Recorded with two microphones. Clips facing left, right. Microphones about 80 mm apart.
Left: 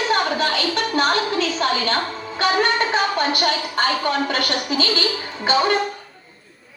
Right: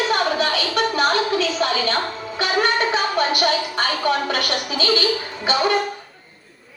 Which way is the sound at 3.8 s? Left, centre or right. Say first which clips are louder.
Left 2 dB; left.